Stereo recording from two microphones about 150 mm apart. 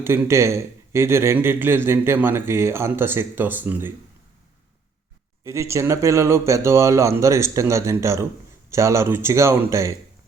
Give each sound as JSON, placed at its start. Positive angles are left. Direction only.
{"t": 0.0, "sound": "a man's voice", "side_deg": -15}
{"t": 5.4, "sound": "speech", "side_deg": -20}